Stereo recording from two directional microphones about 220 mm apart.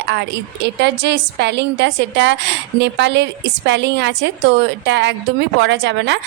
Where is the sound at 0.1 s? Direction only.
50° right (ahead or behind).